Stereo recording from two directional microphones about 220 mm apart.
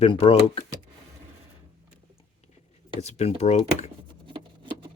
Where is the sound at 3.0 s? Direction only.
30° left (ahead or behind).